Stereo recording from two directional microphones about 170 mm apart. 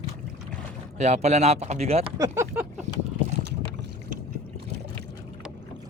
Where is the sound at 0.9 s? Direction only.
40° right (ahead or behind).